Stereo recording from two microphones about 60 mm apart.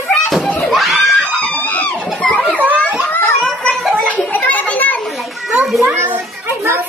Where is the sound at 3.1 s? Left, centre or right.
Left.